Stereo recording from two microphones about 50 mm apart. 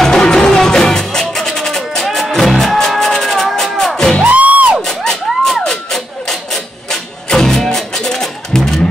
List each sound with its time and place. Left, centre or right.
0.0 s music: centre
2.0 s music: centre
2.3 s music: centre
4.3 s music: right
4.8 s a sound: centre